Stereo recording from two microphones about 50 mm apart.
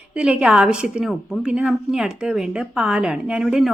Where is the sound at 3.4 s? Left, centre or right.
Centre.